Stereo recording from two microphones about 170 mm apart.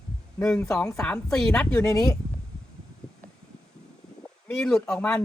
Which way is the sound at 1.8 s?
20° left (ahead or behind).